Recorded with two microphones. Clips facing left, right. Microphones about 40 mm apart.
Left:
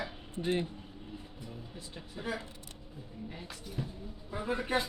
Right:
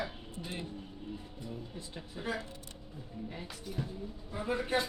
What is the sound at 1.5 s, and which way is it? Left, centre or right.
A man's voice, centre.